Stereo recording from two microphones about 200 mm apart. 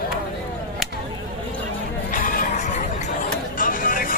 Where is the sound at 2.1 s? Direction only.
45° left (ahead or behind).